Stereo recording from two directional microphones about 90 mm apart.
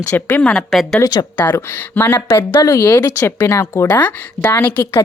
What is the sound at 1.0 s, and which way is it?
Speech, 50° left (ahead or behind).